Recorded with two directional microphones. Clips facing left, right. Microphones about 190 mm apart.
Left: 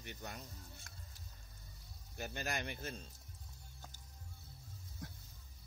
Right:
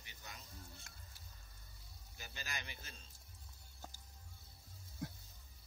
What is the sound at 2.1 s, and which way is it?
Speech, 55° left (ahead or behind).